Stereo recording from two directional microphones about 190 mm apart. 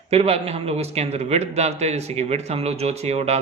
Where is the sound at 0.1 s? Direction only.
35° right (ahead or behind).